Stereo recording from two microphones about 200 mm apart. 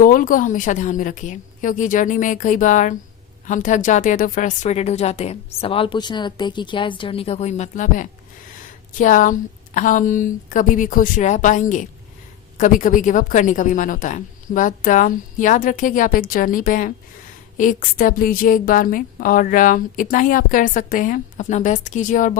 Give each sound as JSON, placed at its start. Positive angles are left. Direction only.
{"t": 0.0, "sound": "a woman's voice", "side_deg": 45}